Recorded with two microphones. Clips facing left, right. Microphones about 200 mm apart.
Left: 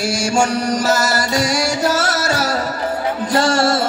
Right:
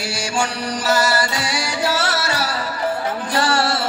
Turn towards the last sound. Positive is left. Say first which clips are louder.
# left 4 dB
turn(degrees=45)  # may be behind; listen again after turning